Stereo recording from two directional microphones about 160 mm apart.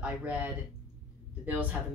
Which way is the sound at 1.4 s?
10° right (ahead or behind).